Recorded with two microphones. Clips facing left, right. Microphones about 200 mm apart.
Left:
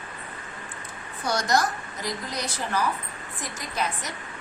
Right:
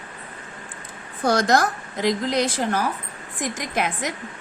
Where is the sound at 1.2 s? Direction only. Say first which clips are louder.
Right 5 dB; 90° right.